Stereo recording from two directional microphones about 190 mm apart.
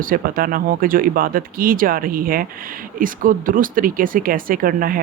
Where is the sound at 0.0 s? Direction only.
50° right (ahead or behind).